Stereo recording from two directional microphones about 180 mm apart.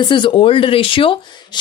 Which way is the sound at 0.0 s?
25° left (ahead or behind).